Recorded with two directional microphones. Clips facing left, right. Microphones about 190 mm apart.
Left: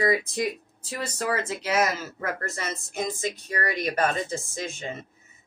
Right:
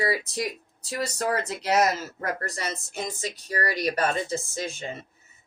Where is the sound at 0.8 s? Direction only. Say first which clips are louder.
Right 2 dB; 40° right (ahead or behind).